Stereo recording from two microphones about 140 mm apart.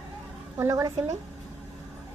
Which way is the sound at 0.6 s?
25° right (ahead or behind).